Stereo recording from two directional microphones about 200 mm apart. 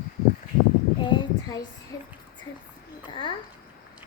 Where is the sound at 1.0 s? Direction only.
20° left (ahead or behind).